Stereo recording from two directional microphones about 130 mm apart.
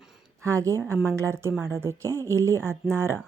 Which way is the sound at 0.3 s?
25° right (ahead or behind).